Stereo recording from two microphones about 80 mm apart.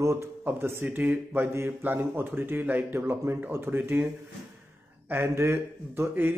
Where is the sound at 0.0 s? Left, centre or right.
Right.